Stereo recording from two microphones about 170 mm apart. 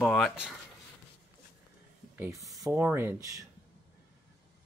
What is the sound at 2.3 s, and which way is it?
Speech, centre (ahead or behind).